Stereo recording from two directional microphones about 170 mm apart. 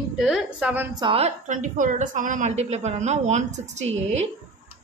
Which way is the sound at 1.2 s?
45° right (ahead or behind).